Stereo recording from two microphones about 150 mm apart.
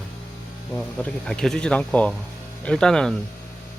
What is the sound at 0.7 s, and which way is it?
Speech, 5° left (ahead or behind).